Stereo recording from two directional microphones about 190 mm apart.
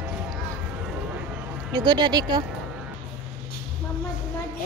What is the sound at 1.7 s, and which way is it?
Speech, 25° right (ahead or behind).